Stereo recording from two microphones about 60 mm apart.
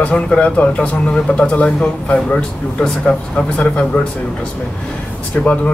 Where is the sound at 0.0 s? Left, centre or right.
Centre.